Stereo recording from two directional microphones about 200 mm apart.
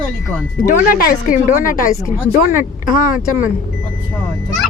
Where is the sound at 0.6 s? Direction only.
45° left (ahead or behind).